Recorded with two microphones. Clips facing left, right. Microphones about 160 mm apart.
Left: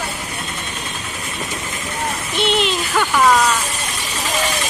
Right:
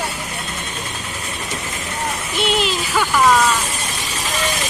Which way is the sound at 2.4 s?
5° right (ahead or behind).